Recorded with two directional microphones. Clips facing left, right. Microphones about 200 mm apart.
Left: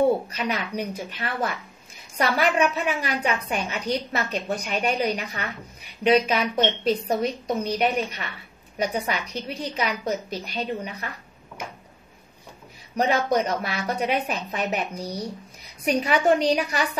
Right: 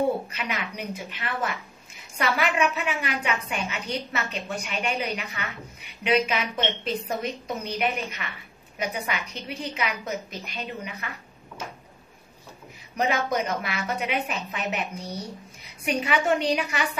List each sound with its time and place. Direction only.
0.3 s a woman's voice: 40° left (ahead or behind)
12.9 s a woman's voice: 35° left (ahead or behind)